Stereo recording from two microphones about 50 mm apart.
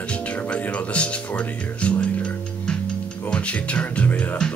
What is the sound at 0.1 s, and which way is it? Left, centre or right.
Music, left.